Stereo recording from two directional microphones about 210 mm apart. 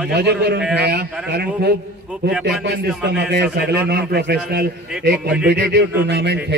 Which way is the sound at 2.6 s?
55° right (ahead or behind).